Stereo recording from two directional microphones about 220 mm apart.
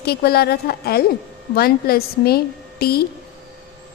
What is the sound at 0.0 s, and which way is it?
A woman's voice, 45° left (ahead or behind).